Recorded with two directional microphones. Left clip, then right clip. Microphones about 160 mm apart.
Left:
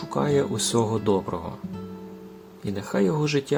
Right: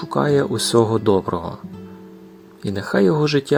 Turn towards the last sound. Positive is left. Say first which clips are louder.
# right 7 dB
turn(degrees=-50)  # may be behind; listen again after turning